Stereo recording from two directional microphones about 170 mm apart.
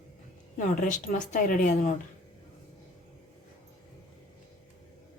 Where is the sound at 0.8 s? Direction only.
45° left (ahead or behind).